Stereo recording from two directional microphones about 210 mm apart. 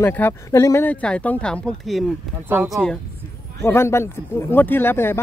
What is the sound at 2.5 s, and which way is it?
Speech, 10° right (ahead or behind).